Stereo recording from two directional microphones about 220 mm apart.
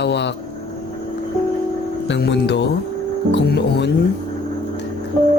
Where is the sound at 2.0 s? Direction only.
50° left (ahead or behind).